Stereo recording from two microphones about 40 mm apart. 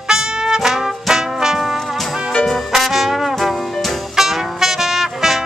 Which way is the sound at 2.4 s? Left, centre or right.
Centre.